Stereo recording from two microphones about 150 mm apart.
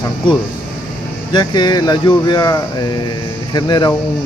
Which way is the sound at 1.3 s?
30° left (ahead or behind).